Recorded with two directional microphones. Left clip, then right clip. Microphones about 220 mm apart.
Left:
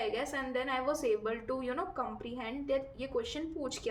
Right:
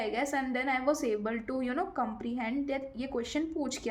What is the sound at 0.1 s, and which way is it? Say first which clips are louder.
A woman's voice: right 3 dB; 40° right (ahead or behind).